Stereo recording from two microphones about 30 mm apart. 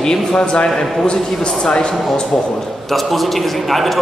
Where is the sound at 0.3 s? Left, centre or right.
Left.